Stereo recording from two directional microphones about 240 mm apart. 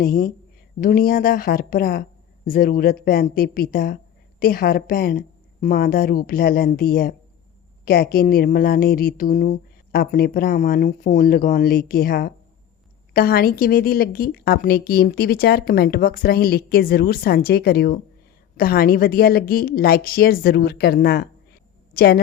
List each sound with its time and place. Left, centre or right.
0.0 s a woman's voice: left